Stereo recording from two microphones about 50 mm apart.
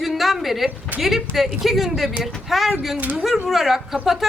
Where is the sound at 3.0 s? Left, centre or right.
Right.